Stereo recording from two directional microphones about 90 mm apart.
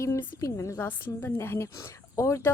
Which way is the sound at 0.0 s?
30° left (ahead or behind).